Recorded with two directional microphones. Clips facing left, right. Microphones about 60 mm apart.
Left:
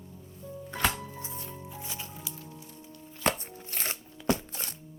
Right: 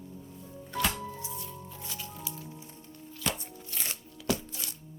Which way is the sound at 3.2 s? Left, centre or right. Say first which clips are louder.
Left 6 dB; left.